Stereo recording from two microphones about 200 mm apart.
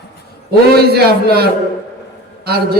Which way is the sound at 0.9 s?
50° right (ahead or behind).